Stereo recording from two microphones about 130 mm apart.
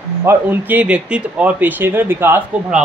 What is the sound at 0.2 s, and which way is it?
Speech, 15° right (ahead or behind).